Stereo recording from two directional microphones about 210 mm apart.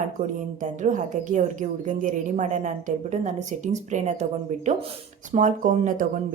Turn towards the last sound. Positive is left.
turn(degrees=-40)  # may be behind; listen again after turning